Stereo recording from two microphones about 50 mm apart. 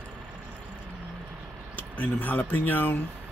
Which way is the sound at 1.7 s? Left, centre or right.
Left.